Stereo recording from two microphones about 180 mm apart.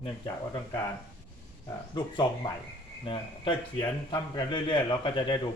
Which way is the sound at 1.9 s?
25° left (ahead or behind).